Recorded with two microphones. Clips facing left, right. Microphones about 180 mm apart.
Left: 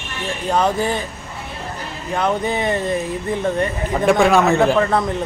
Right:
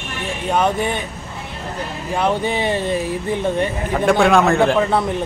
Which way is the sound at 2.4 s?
25° right (ahead or behind).